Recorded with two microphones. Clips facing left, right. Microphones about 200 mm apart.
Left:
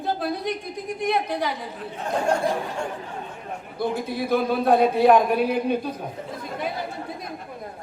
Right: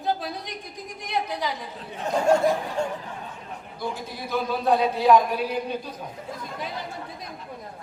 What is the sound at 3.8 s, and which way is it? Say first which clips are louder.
Speech: left 7 dB; 55° left (ahead or behind).